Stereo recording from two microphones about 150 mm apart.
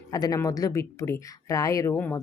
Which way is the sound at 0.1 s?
25° left (ahead or behind).